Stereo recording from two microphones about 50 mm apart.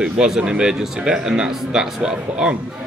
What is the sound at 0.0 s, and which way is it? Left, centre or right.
A man's voice, centre.